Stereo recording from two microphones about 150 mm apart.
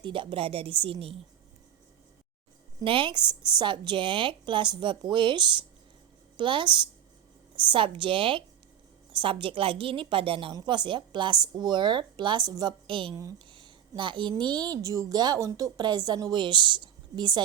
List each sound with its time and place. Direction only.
0.0 s a woman's voice: 35° right (ahead or behind)
2.8 s a woman's voice: 35° right (ahead or behind)